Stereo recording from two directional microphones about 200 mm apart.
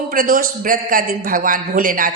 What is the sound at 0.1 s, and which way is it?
A man's voice, 45° right (ahead or behind).